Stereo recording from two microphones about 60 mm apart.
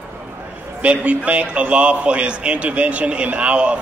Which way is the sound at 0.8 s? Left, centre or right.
Right.